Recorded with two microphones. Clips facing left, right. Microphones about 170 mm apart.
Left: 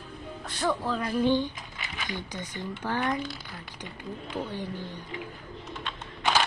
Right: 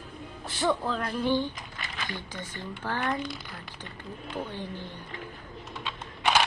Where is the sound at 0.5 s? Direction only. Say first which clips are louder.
Right 1 dB; centre (ahead or behind).